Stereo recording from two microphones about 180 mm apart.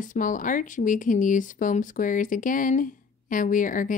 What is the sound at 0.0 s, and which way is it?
Speech, 45° left (ahead or behind).